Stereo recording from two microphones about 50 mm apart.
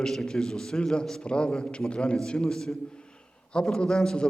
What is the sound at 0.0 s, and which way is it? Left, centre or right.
A man's voice, centre.